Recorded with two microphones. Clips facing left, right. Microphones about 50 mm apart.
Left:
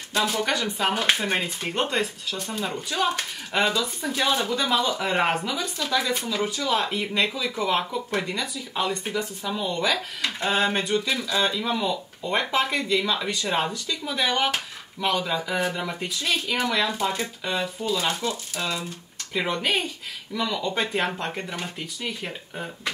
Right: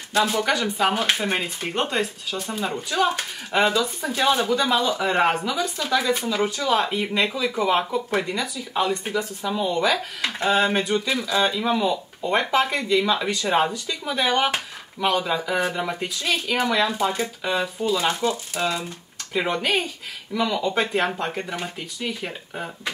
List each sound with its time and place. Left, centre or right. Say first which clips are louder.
0.1 s speech: right 3 dB; centre
5.8 s speech: right 2 dB; centre
18.0 s speech: right 4 dB; centre
19.6 s speech: right 2 dB; centre
20.3 s speech: right 4 dB; centre